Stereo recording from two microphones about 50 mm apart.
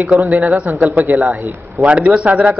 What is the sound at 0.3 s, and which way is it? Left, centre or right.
Speech, right.